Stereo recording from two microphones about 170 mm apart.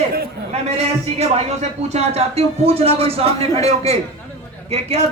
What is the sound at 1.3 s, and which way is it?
Speech, 40° right (ahead or behind).